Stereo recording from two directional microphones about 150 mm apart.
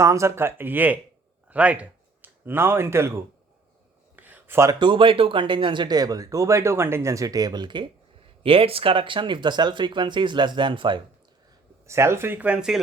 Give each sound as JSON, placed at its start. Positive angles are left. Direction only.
{"t": 0.0, "sound": "speech", "side_deg": -20}
{"t": 4.1, "sound": "a sound", "side_deg": -10}
{"t": 4.7, "sound": "speech", "side_deg": -30}
{"t": 11.9, "sound": "speech", "side_deg": -20}